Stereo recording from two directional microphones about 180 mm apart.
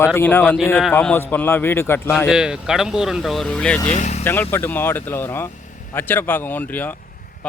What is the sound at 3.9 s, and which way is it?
Speech, 40° left (ahead or behind).